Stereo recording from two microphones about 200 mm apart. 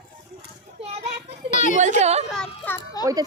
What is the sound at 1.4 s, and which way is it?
Children playing, 40° left (ahead or behind).